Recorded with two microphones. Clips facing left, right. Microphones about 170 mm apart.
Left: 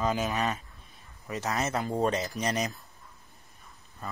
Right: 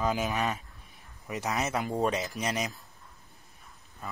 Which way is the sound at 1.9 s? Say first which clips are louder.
Left 2 dB; centre (ahead or behind).